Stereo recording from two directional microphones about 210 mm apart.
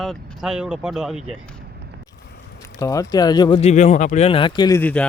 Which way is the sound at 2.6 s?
15° left (ahead or behind).